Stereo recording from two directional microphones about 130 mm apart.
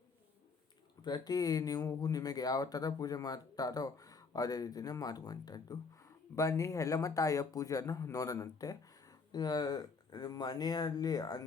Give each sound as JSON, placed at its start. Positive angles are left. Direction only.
{"t": 1.0, "sound": "speech", "side_deg": 30}